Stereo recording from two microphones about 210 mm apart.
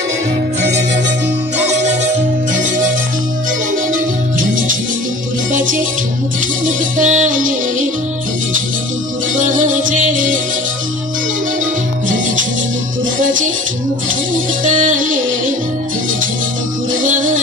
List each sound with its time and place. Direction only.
3.9 s music: 40° right (ahead or behind)
9.3 s music: 40° right (ahead or behind)
13.2 s music: 40° right (ahead or behind)
17.0 s music: 40° right (ahead or behind)